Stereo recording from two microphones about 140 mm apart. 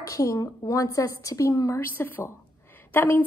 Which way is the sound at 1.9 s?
15° left (ahead or behind).